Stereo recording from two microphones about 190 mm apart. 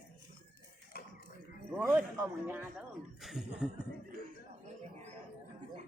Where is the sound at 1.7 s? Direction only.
10° right (ahead or behind).